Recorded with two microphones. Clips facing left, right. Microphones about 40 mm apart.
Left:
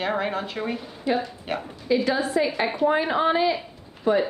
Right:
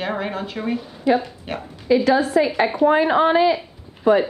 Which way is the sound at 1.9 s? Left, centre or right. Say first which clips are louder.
Right 6 dB; right.